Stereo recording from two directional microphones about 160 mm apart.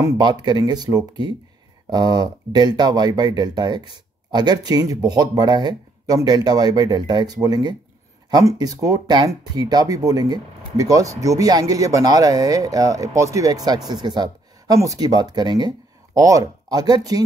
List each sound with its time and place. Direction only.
0.0 s speech: 25° right (ahead or behind)